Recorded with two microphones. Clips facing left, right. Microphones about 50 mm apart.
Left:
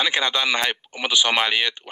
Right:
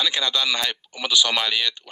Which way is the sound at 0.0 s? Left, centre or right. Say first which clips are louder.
Left 2 dB; left.